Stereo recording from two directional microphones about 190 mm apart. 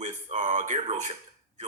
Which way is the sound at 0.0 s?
40° right (ahead or behind).